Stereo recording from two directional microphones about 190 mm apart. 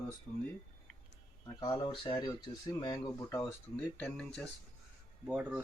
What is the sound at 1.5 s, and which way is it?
Speech, 20° left (ahead or behind).